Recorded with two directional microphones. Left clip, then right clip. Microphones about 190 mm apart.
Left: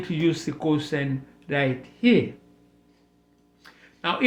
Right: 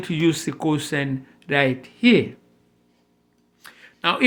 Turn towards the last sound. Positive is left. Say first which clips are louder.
# right 4 dB
turn(degrees=-40)  # may be behind; listen again after turning